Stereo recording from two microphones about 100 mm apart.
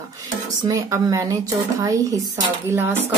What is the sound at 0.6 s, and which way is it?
Speech, 35° right (ahead or behind).